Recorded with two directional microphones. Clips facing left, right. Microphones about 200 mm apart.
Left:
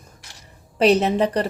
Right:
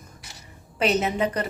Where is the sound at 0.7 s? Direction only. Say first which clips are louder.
Left 6 dB; 35° left (ahead or behind).